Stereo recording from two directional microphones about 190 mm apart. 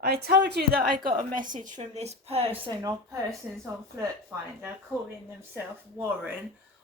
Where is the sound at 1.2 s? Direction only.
45° right (ahead or behind); by 3.2 s 20° right (ahead or behind).